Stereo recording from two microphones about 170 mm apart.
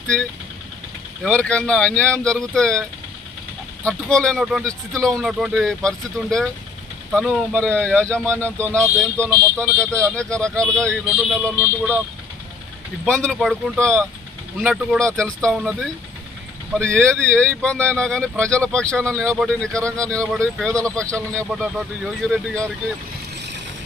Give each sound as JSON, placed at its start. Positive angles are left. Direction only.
{"t": 1.2, "sound": "speech", "side_deg": 5}
{"t": 3.8, "sound": "speech", "side_deg": 5}
{"t": 8.4, "sound": "speech", "side_deg": -15}
{"t": 8.7, "sound": "speech", "side_deg": 5}
{"t": 13.1, "sound": "speech", "side_deg": 5}
{"t": 19.1, "sound": "speech", "side_deg": -15}
{"t": 19.4, "sound": "speech", "side_deg": 5}